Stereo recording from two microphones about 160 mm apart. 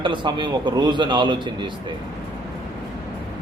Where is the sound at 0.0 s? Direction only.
30° right (ahead or behind).